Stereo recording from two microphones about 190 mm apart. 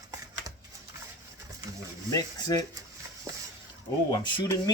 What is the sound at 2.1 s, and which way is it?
Speech, 20° left (ahead or behind).